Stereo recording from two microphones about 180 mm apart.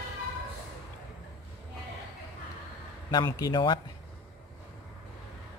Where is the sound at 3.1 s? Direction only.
20° left (ahead or behind).